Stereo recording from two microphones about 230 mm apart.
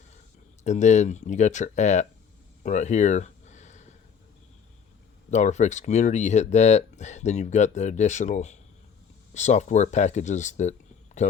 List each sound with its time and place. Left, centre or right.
0.6 s speech: left
2.6 s a sound: left
5.3 s speech: left